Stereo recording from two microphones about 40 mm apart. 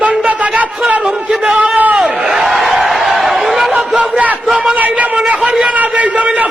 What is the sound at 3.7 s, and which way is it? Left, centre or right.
A man's voice, right.